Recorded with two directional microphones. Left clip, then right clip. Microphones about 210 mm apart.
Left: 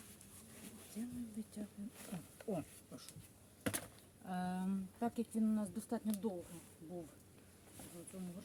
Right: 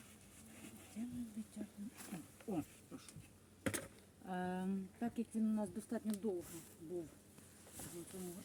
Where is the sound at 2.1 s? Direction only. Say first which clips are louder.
Left 1 dB; 35° left (ahead or behind).